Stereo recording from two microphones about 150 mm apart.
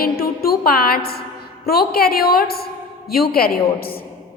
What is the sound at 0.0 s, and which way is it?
A woman's voice, 80° left.